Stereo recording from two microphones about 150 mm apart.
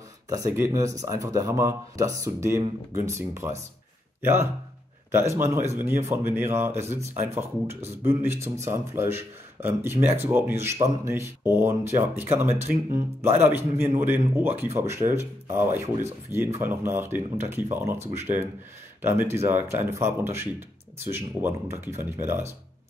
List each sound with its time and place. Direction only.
0.3 s speech: 20° right (ahead or behind)